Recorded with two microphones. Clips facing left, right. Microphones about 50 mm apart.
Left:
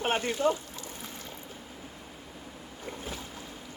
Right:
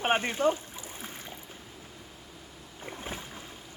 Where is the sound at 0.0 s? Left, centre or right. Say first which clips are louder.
Right 1 dB; right.